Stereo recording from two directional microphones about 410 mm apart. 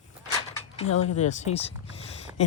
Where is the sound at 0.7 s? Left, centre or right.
Centre.